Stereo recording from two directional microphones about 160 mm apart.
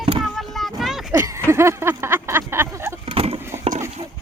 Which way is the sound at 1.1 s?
20° right (ahead or behind).